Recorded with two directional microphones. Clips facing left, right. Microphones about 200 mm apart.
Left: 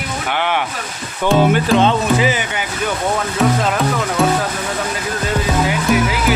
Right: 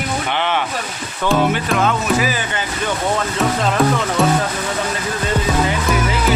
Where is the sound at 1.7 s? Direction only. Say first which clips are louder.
Left 4 dB; 30° left (ahead or behind).